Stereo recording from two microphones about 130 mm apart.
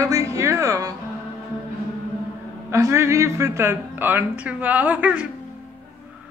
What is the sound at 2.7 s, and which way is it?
A woman's voice, 20° right (ahead or behind).